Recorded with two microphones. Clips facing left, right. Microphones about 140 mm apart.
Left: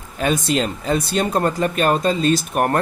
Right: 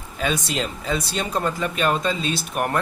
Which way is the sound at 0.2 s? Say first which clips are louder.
Left 5 dB; 50° left (ahead or behind).